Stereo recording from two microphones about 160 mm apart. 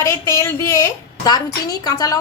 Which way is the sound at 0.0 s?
20° left (ahead or behind).